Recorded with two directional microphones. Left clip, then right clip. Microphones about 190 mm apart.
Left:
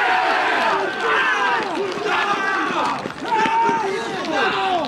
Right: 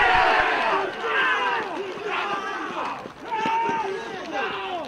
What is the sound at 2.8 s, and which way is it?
Run, 45° left (ahead or behind).